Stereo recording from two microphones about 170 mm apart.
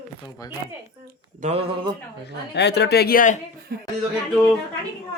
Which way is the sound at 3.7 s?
65° right (ahead or behind).